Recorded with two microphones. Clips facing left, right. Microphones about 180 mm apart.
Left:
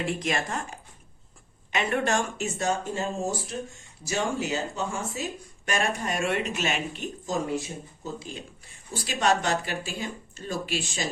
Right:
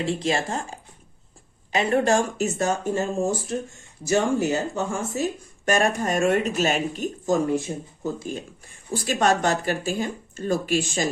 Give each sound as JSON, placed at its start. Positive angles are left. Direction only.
{"t": 0.0, "sound": "speech", "side_deg": -30}